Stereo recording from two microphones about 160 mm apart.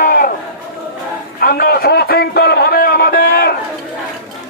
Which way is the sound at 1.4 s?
65° left (ahead or behind).